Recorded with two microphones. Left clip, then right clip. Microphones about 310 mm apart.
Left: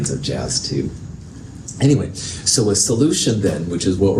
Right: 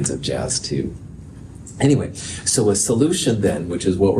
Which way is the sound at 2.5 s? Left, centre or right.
Right.